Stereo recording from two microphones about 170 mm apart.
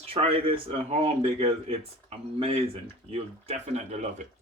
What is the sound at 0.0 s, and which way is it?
Speech, 35° right (ahead or behind).